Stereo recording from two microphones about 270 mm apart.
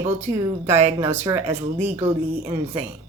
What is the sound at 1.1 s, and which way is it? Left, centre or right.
Speech, right.